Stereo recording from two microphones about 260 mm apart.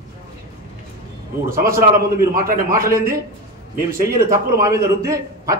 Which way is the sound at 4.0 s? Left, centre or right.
Centre.